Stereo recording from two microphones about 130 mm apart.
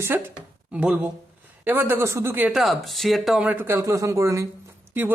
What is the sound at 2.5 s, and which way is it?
Speech, centre (ahead or behind).